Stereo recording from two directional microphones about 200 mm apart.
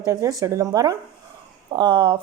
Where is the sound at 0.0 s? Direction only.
15° right (ahead or behind).